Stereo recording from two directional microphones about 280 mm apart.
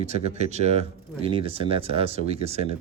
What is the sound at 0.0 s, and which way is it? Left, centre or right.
Speech, right.